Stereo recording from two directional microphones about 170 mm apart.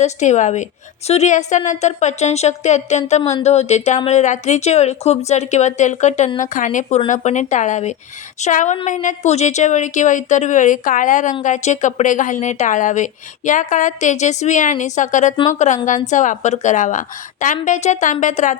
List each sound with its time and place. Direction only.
0.0 s speech: 45° left (ahead or behind)